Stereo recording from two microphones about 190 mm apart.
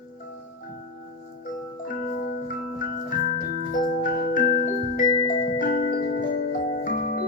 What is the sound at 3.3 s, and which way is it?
Music, 45° left (ahead or behind).